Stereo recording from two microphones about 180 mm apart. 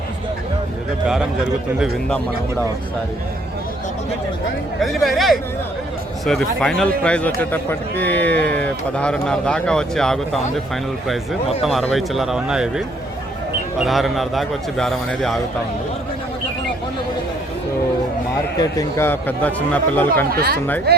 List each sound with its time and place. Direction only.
1.0 s a man's voice: 5° right (ahead or behind)
4.8 s a man's voice: centre (ahead or behind)
11.6 s a man's voice: centre (ahead or behind)
13.8 s a man's voice: centre (ahead or behind)
18.6 s speech: 15° left (ahead or behind)
20.3 s speech: 60° right (ahead or behind)